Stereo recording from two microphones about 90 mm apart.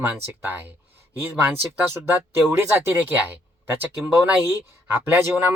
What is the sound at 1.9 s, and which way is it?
Speech, 30° right (ahead or behind).